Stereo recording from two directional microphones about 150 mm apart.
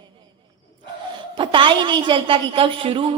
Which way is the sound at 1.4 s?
35° right (ahead or behind).